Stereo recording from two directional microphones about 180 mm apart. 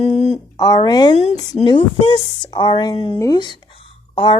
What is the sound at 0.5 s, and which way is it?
A woman's voice, 20° left (ahead or behind).